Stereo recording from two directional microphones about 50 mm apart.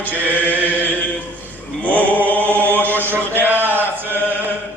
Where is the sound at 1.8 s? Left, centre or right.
Left.